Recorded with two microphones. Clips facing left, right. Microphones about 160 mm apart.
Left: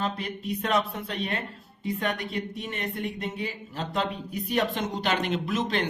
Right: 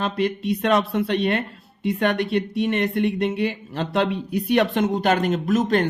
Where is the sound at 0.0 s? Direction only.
80° right.